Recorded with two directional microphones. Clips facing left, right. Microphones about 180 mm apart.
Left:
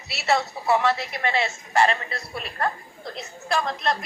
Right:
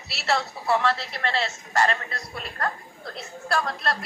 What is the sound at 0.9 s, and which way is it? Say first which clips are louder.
Speech: left 2 dB; 15° left (ahead or behind).